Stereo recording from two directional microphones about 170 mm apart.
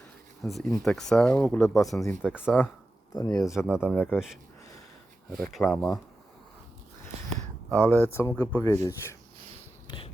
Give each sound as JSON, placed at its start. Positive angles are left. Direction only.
{"t": 0.4, "sound": "speech", "side_deg": 0}
{"t": 2.2, "sound": "speech", "side_deg": -5}
{"t": 3.2, "sound": "speech", "side_deg": 20}
{"t": 3.7, "sound": "speech", "side_deg": -5}
{"t": 3.9, "sound": "speech", "side_deg": 10}
{"t": 5.3, "sound": "speech", "side_deg": 0}
{"t": 7.7, "sound": "speech", "side_deg": 10}
{"t": 9.8, "sound": "a sound", "side_deg": 30}